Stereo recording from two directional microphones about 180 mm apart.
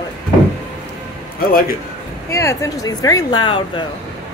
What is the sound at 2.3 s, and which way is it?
A woman's voice, 15° left (ahead or behind).